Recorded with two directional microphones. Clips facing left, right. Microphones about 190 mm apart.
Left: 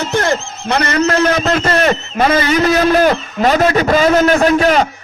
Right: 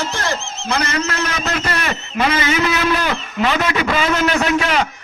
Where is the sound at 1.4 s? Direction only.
45° left (ahead or behind).